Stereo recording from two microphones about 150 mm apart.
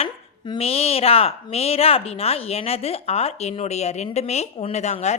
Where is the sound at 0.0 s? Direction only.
35° left (ahead or behind).